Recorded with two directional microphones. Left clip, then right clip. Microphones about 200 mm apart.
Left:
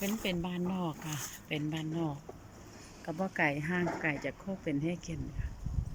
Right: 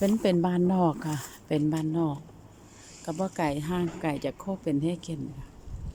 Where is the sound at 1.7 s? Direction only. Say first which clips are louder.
Right 8 dB; 25° right (ahead or behind).